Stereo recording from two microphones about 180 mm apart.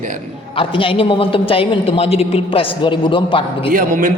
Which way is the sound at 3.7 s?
50° right (ahead or behind).